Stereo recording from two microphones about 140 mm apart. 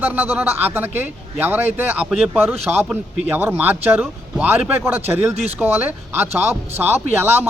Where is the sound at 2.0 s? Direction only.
5° right (ahead or behind).